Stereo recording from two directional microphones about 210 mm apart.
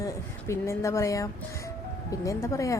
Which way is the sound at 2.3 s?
15° left (ahead or behind).